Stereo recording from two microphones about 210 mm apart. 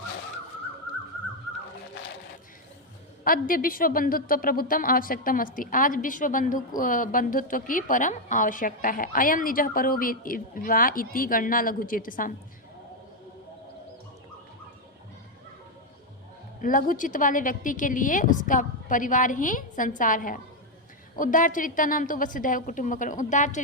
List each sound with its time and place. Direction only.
3.2 s a woman's voice: 40° left (ahead or behind)
16.6 s a woman's voice: 40° left (ahead or behind)